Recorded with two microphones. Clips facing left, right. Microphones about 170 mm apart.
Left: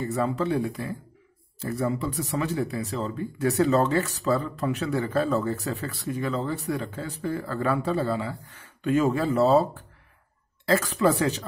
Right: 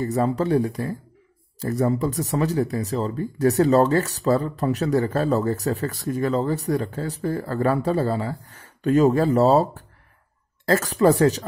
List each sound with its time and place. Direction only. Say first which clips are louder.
0.0 s speech: right 4 dB; 40° right (ahead or behind)